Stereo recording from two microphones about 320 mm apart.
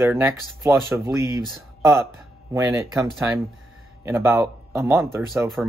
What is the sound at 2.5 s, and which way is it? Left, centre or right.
Speech, centre.